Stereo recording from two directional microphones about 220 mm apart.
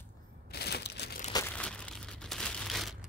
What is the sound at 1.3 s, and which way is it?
Crumpling, 10° left (ahead or behind).